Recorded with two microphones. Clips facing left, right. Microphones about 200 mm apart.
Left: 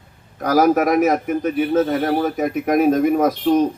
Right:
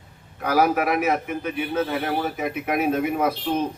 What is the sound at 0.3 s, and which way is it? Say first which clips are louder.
A man's voice: left 5 dB; 40° left (ahead or behind).